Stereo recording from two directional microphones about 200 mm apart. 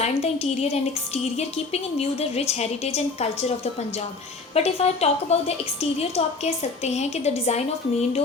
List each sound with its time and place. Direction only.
0.0 s speech: 30° left (ahead or behind)